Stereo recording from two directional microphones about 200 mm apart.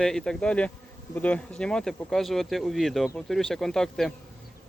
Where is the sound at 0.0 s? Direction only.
5° left (ahead or behind).